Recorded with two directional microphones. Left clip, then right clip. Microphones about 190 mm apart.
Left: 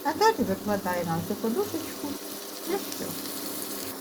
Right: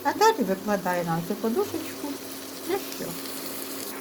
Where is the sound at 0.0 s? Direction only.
Centre (ahead or behind).